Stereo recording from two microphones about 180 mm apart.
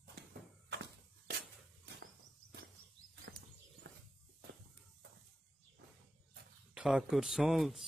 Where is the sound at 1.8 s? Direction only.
70° right (ahead or behind).